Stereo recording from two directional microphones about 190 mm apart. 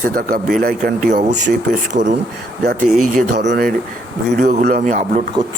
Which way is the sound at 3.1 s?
65° right (ahead or behind).